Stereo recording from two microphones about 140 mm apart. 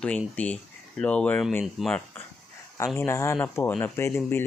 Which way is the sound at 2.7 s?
20° left (ahead or behind).